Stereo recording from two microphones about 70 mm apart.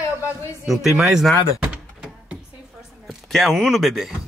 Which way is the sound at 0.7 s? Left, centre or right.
Centre.